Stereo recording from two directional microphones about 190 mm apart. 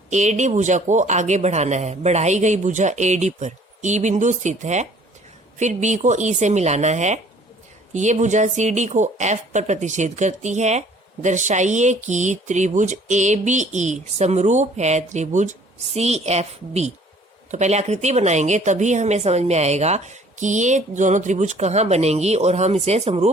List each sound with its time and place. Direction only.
0.1 s speech: 35° right (ahead or behind)